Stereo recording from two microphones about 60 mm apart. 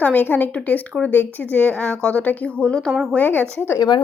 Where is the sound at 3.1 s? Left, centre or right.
Left.